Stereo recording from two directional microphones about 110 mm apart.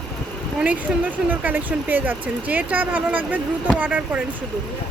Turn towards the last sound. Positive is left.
turn(degrees=-15)  # may be behind; listen again after turning